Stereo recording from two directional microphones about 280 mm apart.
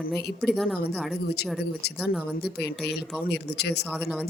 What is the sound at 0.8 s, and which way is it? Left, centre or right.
A woman's voice, left.